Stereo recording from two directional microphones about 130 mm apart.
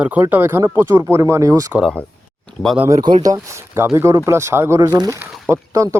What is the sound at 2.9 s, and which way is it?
Speech, 30° right (ahead or behind).